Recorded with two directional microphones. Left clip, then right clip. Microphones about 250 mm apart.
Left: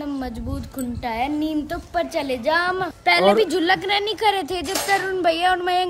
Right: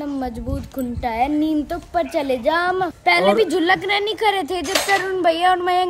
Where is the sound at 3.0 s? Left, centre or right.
Right.